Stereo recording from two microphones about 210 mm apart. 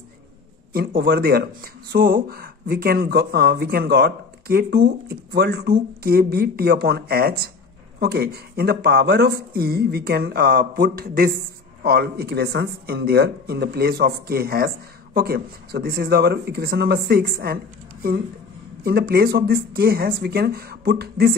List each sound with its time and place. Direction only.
0.7 s speech: 50° right (ahead or behind)
18.9 s speech: 45° right (ahead or behind)